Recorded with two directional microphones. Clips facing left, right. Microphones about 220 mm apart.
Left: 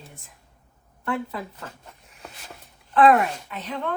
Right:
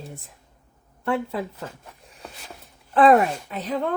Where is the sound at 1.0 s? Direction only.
25° right (ahead or behind).